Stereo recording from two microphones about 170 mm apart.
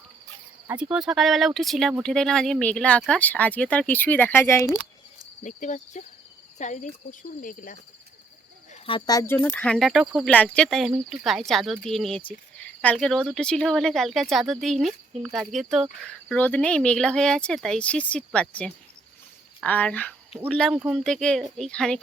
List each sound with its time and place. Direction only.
0.7 s speech: 5° right (ahead or behind); by 4.7 s 15° left (ahead or behind)
5.4 s speech: 45° left (ahead or behind)
8.7 s speech: 30° left (ahead or behind); by 10.3 s 5° right (ahead or behind)
10.3 s speech: 5° left (ahead or behind)